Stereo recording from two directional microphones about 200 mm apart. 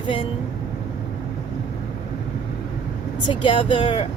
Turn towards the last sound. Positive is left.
turn(degrees=25)  # may be behind; listen again after turning